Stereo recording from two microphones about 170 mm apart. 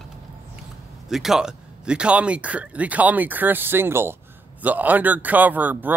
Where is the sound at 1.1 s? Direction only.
Centre (ahead or behind).